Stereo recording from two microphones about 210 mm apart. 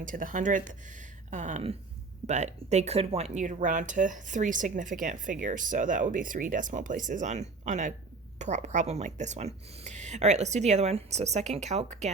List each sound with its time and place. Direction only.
0.0 s speech: 40° right (ahead or behind)